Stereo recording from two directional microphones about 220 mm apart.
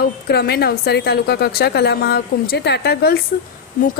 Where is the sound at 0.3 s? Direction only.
45° left (ahead or behind).